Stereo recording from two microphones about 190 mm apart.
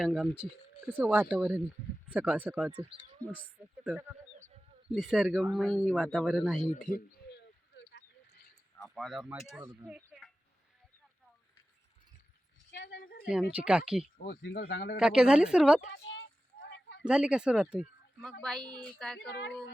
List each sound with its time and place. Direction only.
0.0 s speech: centre (ahead or behind)
2.7 s speech: 25° right (ahead or behind)
3.8 s a sound: 10° right (ahead or behind)
4.9 s speech: centre (ahead or behind)
6.7 s speech: 40° left (ahead or behind)
7.3 s a sound: 60° left (ahead or behind)
8.8 s a woman's voice: centre (ahead or behind)
12.7 s a sound: 70° left (ahead or behind)
13.2 s speech: 5° right (ahead or behind)
14.3 s speech: 60° left (ahead or behind)
14.9 s speech: 5° right (ahead or behind)
15.9 s a sound: 65° left (ahead or behind)
17.0 s speech: 5° right (ahead or behind)
19.3 s a woman's voice: 65° left (ahead or behind)